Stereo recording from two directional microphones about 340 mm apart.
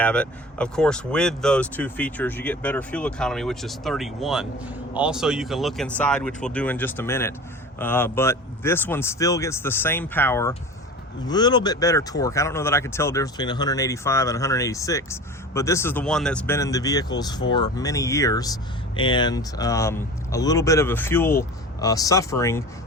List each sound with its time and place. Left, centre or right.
0.0 s speech: centre